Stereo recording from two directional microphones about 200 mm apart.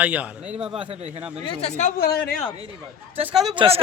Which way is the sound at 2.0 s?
55° left (ahead or behind).